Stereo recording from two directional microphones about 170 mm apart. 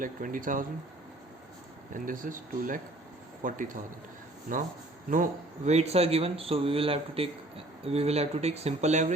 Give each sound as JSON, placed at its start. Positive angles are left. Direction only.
{"t": 0.0, "sound": "speech", "side_deg": -50}
{"t": 2.0, "sound": "speech", "side_deg": -50}